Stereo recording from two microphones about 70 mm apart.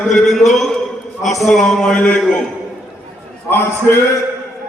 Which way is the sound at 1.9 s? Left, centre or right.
Left.